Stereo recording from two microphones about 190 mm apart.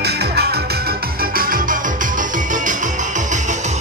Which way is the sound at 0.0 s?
60° right (ahead or behind).